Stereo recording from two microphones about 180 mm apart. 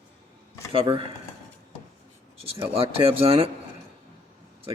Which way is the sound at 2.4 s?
30° right (ahead or behind).